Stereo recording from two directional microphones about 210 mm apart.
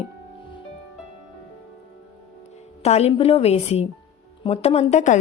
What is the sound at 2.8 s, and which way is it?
A woman's voice, 30° left (ahead or behind).